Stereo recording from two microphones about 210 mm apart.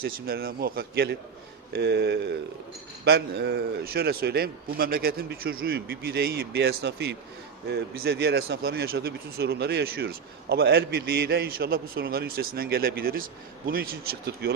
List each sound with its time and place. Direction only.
0.0 s speech: 45° right (ahead or behind)